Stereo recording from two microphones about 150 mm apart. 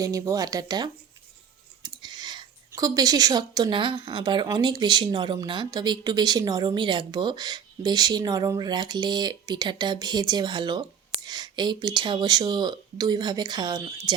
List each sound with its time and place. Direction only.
0.0 s speech: 25° right (ahead or behind)